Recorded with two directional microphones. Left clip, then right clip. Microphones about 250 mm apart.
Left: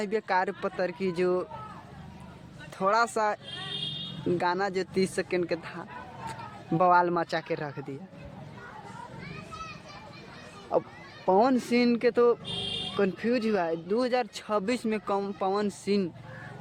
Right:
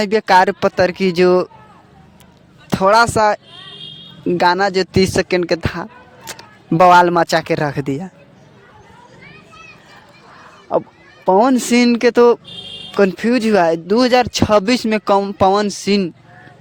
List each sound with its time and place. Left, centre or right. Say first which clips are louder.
0.0 s speech: right 16 dB; right
2.6 s speech: right 14 dB; right
10.7 s speech: right 10 dB; right